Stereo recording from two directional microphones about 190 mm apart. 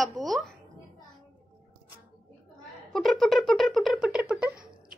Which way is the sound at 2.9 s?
Centre (ahead or behind).